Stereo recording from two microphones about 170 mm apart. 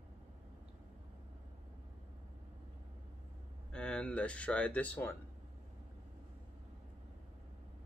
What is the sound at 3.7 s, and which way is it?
Speech, 5° left (ahead or behind).